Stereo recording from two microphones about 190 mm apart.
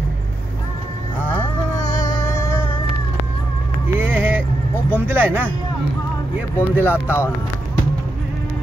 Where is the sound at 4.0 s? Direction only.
10° right (ahead or behind).